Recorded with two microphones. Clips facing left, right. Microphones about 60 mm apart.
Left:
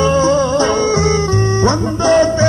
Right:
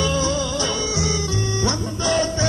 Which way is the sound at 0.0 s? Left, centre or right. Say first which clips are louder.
Left 10 dB; left.